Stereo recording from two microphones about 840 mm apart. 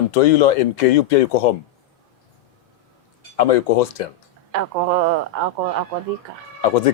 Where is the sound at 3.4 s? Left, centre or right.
Left.